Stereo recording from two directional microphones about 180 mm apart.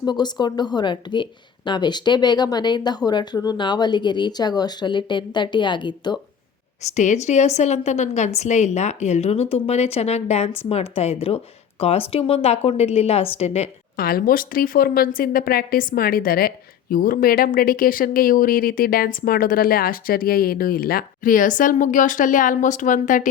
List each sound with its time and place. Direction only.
0.0 s speech: 25° left (ahead or behind)
6.8 s speech: 40° left (ahead or behind)
13.9 s speech: 55° left (ahead or behind)